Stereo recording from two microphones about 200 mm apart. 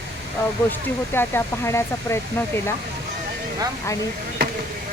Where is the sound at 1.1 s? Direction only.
10° left (ahead or behind).